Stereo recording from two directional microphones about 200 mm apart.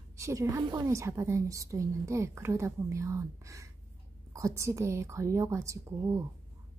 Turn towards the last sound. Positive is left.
turn(degrees=-15)  # may be behind; listen again after turning